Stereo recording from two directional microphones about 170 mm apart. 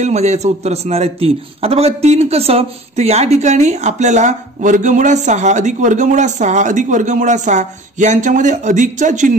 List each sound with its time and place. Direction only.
0.0 s a man's voice: 40° right (ahead or behind)